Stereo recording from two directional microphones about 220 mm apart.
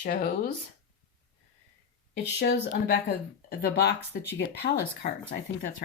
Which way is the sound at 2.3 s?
50° left (ahead or behind).